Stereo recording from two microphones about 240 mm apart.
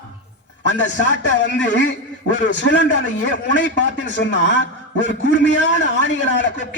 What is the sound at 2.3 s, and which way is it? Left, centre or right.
A man's voice, left.